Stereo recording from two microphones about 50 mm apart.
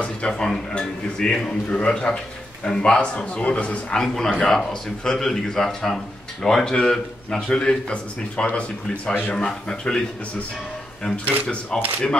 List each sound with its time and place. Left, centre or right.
0.0 s a man's voice: centre
3.9 s a man's voice: centre
11.4 s a man's voice: centre